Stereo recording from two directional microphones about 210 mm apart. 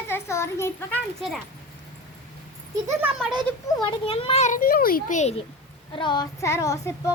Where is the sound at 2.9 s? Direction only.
10° right (ahead or behind).